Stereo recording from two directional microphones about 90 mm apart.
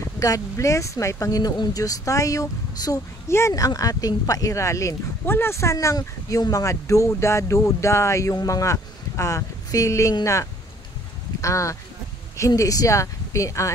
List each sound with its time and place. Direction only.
0.0 s speech: 35° left (ahead or behind)
3.3 s speech: 30° left (ahead or behind)
3.5 s speech: 45° left (ahead or behind)
5.2 s speech: 25° left (ahead or behind)